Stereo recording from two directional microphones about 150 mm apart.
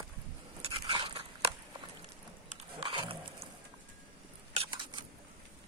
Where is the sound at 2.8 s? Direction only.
35° right (ahead or behind).